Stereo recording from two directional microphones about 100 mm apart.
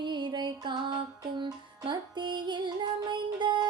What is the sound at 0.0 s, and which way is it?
Music, 50° right (ahead or behind).